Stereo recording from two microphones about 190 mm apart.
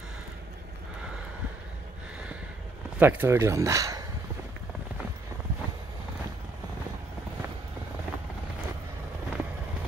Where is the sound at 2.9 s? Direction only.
10° right (ahead or behind).